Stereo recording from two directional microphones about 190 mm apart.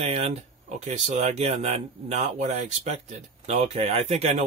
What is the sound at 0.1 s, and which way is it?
Speech, 35° right (ahead or behind).